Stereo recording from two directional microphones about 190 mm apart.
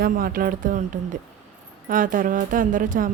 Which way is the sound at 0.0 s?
50° right (ahead or behind).